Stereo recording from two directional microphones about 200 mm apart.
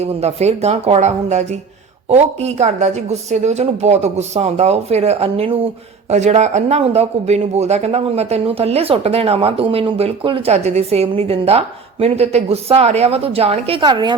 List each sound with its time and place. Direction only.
0.0 s speech: 30° right (ahead or behind)